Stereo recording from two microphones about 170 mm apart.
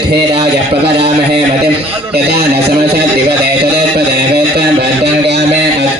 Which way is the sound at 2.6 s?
70° right (ahead or behind).